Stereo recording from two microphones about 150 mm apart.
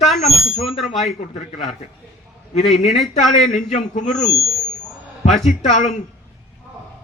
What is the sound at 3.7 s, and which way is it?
Speech, 50° left (ahead or behind).